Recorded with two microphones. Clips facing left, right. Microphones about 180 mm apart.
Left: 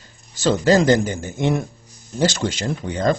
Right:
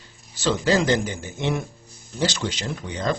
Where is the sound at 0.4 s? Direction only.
45° left (ahead or behind).